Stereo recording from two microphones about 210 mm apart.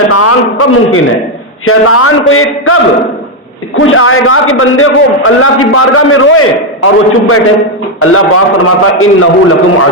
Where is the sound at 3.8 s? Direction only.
75° left (ahead or behind).